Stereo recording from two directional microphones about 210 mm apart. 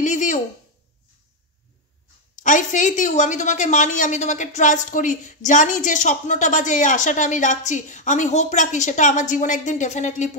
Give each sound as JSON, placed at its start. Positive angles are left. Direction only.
{"t": 0.0, "sound": "speech", "side_deg": 35}
{"t": 2.3, "sound": "a woman's voice", "side_deg": 35}